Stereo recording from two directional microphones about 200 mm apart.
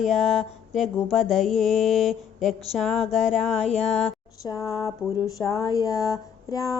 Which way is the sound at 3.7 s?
30° left (ahead or behind).